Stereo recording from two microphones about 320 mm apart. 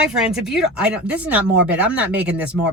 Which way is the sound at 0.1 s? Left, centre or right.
Centre.